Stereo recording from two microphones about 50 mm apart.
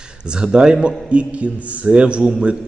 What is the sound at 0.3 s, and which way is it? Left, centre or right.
A man's voice, centre.